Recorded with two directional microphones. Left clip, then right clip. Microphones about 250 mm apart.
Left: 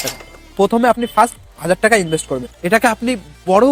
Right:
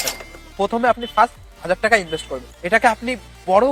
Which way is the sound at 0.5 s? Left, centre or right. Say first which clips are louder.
Left 4 dB; left.